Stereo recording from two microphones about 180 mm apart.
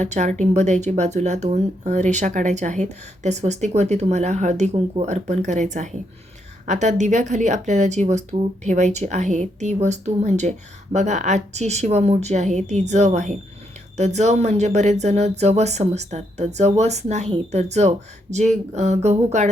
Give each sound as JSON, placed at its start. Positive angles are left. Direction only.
{"t": 0.0, "sound": "speech", "side_deg": -40}